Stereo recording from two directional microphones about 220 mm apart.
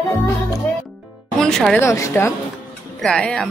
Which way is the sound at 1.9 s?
15° left (ahead or behind).